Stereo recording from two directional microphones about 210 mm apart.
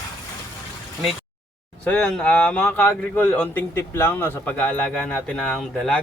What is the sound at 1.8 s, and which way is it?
Speech, 5° left (ahead or behind).